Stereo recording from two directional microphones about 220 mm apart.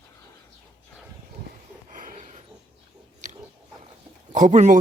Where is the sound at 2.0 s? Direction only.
35° right (ahead or behind).